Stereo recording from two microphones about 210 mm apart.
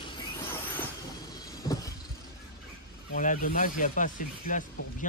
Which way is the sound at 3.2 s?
40° left (ahead or behind).